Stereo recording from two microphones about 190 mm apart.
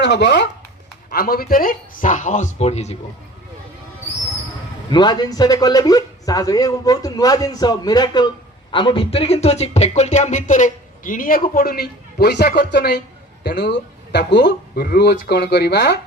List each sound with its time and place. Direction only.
0.0 s speech: 65° left (ahead or behind)
1.1 s speech: 55° left (ahead or behind); by 3.0 s 35° left (ahead or behind)
4.9 s speech: 25° left (ahead or behind); by 16.0 s 60° left (ahead or behind)